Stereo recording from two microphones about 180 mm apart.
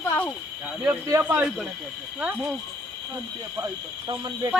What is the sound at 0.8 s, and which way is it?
Speech, 15° right (ahead or behind).